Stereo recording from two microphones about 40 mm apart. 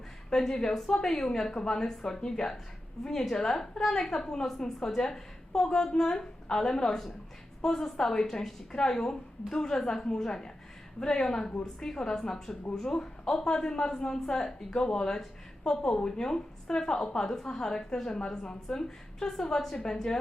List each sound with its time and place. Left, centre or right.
0.3 s a woman's voice: centre